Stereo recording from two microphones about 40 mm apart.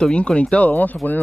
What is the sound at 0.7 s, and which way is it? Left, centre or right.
Speech, left.